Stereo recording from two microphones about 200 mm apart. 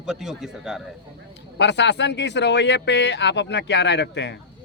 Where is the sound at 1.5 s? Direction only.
60° left (ahead or behind).